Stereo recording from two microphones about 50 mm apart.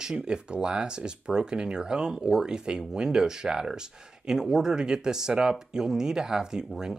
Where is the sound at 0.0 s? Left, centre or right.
Centre.